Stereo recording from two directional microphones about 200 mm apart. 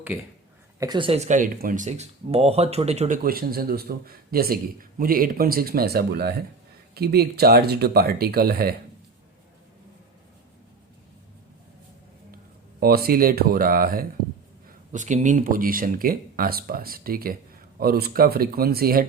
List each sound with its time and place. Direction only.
0.1 s speech: 5° right (ahead or behind)
0.8 s speech: 20° right (ahead or behind)
3.2 s speech: 50° right (ahead or behind)
12.8 s speech: 50° right (ahead or behind)